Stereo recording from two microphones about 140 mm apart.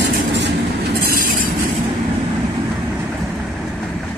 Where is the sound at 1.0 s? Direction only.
90° right.